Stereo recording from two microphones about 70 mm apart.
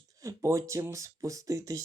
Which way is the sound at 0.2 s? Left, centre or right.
Right.